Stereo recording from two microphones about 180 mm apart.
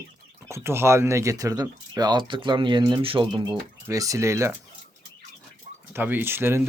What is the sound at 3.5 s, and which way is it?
Speech, 15° right (ahead or behind).